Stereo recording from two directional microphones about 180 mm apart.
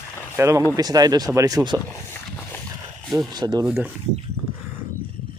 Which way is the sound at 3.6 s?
10° right (ahead or behind).